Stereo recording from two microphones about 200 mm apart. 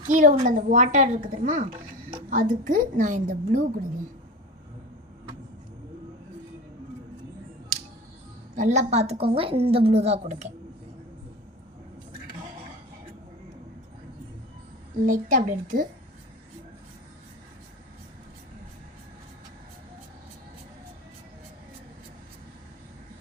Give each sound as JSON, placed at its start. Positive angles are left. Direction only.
{"t": 0.1, "sound": "a woman's voice", "side_deg": -40}
{"t": 8.5, "sound": "a woman's voice", "side_deg": -35}
{"t": 15.0, "sound": "a woman's voice", "side_deg": -40}